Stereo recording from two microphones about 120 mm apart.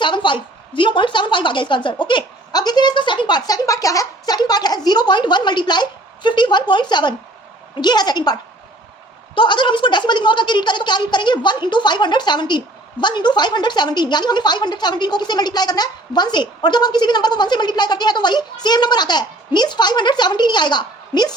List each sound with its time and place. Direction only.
0.0 s a woman's voice: 40° left (ahead or behind)